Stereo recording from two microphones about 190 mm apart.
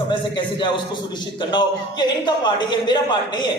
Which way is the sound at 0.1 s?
25° left (ahead or behind).